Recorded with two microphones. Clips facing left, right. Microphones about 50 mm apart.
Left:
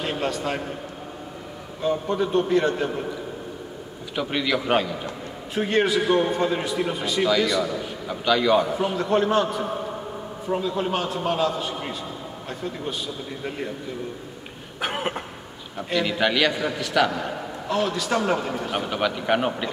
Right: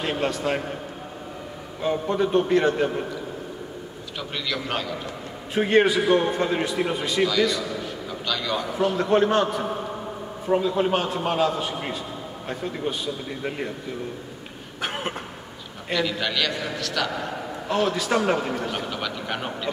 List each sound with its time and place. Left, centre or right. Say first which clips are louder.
0.0 s a man's voice: right 1 dB; centre
2.0 s a man's voice: right 3 dB; centre
4.2 s a man's voice: left 6 dB; centre
5.5 s a man's voice: right 3 dB; centre
7.2 s a man's voice: left 2 dB; centre
8.1 s a man's voice: left 9 dB; centre
8.9 s a man's voice: right 1 dB; centre
14.8 s vehicle: left 2 dB; centre
15.9 s a man's voice: left 3 dB; centre
17.1 s a man's voice: left 1 dB; centre